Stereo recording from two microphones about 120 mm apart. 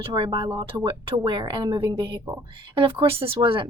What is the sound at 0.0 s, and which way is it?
Speech, 40° right (ahead or behind).